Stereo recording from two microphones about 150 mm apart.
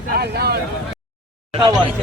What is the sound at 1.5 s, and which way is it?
Speech, 35° right (ahead or behind).